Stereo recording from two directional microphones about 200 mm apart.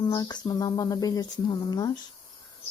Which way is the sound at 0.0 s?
20° left (ahead or behind).